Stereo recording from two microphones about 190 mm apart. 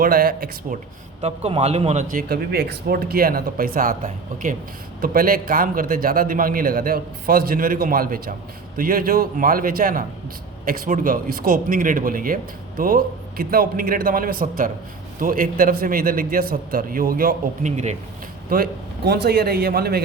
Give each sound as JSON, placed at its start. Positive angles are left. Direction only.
{"t": 0.0, "sound": "speech", "side_deg": -50}
{"t": 1.2, "sound": "speech", "side_deg": -30}
{"t": 4.9, "sound": "speech", "side_deg": -50}
{"t": 18.5, "sound": "a man's voice", "side_deg": -55}